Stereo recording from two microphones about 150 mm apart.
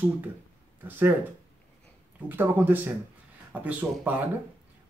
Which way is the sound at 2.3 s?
10° right (ahead or behind).